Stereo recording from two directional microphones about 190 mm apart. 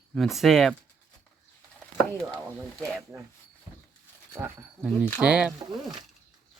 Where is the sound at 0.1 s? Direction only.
Centre (ahead or behind).